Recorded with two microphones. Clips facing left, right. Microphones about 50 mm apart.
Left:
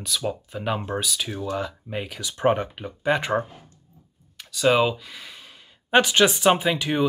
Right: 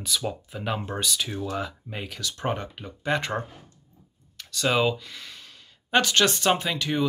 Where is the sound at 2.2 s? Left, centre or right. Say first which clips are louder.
Left 8 dB; centre.